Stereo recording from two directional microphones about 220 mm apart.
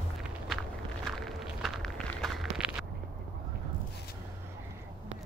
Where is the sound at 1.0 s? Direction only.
Centre (ahead or behind).